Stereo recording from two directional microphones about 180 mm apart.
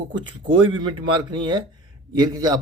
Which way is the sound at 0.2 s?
25° right (ahead or behind).